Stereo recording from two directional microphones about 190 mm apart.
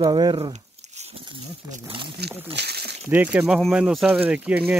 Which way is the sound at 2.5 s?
60° right (ahead or behind).